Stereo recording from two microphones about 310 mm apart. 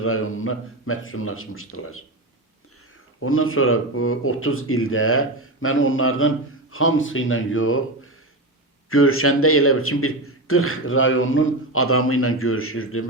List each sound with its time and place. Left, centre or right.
0.0 s a man's voice: left
3.2 s a man's voice: left